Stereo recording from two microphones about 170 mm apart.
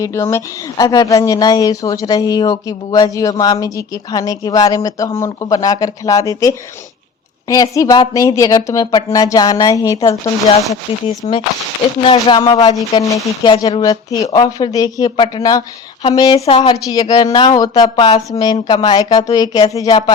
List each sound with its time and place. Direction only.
0.0 s a woman's voice: 15° left (ahead or behind); by 12.5 s 35° left (ahead or behind)
12.9 s a woman's voice: 20° left (ahead or behind)